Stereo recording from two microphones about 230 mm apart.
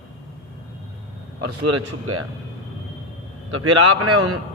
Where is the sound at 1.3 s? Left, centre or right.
Right.